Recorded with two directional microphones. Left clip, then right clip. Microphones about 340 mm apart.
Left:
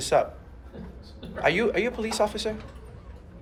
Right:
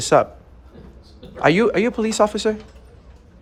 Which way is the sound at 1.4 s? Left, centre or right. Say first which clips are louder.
Right 7 dB; right.